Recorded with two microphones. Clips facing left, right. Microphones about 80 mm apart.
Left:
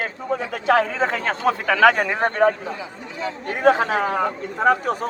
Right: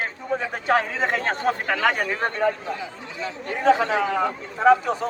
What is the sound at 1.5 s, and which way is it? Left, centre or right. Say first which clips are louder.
Speech: left 7 dB; left.